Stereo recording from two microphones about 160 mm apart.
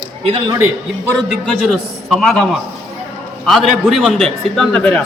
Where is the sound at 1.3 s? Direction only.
Centre (ahead or behind).